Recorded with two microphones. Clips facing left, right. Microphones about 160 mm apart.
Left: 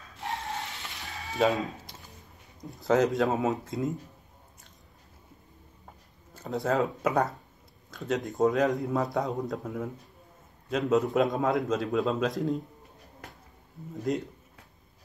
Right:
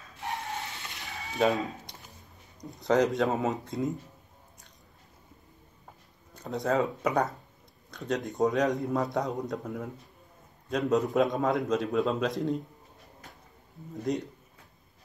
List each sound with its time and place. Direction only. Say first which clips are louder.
0.8 s a sound: left 1 dB; 20° right (ahead or behind)
1.4 s a man's voice: even; centre (ahead or behind)
6.3 s a man's voice: even; 5° left (ahead or behind)
13.9 s a man's voice: left 1 dB; centre (ahead or behind)